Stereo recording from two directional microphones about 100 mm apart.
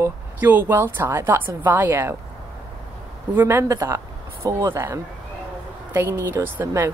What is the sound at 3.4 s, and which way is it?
A woman's voice, 30° right (ahead or behind).